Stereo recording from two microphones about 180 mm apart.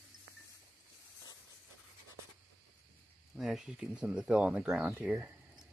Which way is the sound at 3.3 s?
Centre (ahead or behind).